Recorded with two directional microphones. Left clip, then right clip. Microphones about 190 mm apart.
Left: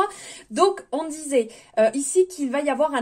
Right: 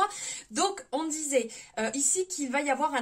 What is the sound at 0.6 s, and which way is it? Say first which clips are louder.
Speech: left 9 dB; 35° left (ahead or behind).